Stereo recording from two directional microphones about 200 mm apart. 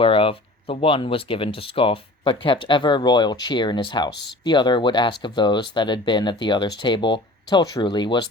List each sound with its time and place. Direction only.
0.0 s speech: 25° left (ahead or behind)